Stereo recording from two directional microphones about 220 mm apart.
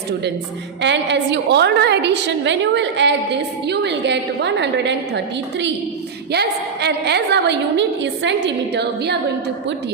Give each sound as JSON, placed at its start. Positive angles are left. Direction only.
{"t": 0.8, "sound": "a woman's voice", "side_deg": -55}